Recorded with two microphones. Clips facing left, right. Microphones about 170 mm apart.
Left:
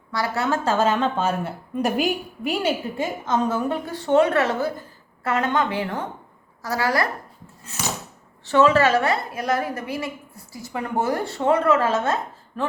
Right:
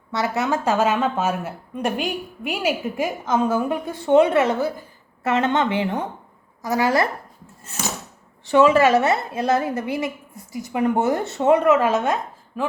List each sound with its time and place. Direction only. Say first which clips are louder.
0.1 s a woman's voice: right 1 dB; 20° right (ahead or behind)
1.7 s a woman's voice: left 2 dB; 5° left (ahead or behind); by 7.1 s 20° right (ahead or behind)
8.4 s a woman's voice: right 2 dB; 15° right (ahead or behind)